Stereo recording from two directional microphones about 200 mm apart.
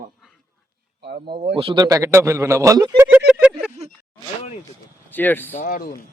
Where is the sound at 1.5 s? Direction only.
25° right (ahead or behind).